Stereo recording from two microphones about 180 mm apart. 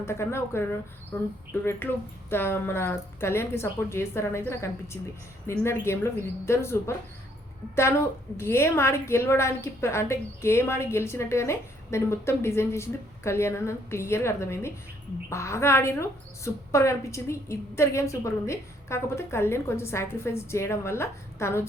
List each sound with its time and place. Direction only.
0.0 s a woman's voice: 15° left (ahead or behind)